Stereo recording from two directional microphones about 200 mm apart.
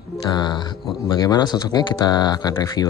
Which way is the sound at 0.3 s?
20° left (ahead or behind).